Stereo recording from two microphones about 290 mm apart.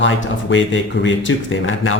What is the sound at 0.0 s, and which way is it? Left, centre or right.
Speech, left.